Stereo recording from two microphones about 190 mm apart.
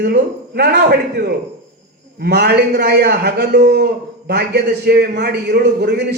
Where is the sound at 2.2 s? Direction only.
60° right (ahead or behind).